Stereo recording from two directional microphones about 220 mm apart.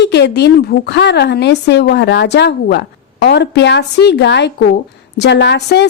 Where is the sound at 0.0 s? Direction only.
50° left (ahead or behind).